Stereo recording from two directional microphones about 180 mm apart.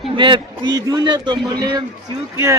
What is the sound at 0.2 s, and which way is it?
Speech, 25° right (ahead or behind).